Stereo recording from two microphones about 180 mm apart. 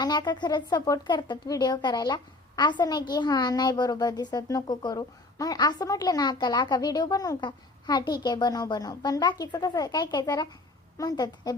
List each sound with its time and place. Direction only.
0.0 s a woman's voice: 25° left (ahead or behind)